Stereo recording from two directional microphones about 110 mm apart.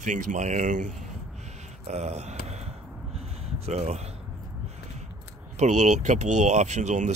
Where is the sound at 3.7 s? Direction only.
80° right.